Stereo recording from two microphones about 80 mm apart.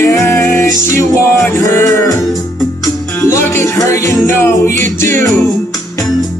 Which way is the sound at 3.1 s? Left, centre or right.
Left.